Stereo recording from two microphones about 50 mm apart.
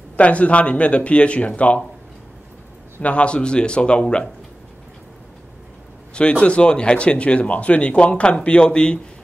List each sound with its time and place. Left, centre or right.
0.2 s speech: left
3.0 s speech: left
6.1 s speech: left